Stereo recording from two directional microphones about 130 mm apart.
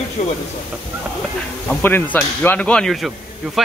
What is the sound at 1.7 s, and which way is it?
Speech, 15° left (ahead or behind).